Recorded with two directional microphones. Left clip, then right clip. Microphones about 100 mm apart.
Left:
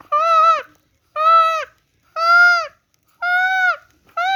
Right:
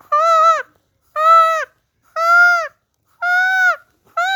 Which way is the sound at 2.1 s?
45° right (ahead or behind).